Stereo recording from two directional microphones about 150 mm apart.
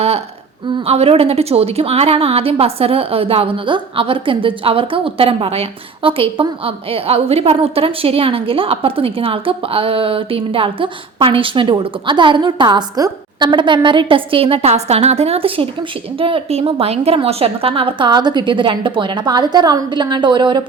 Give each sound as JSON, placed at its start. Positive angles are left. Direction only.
{"t": 0.9, "sound": "a woman's voice", "side_deg": -40}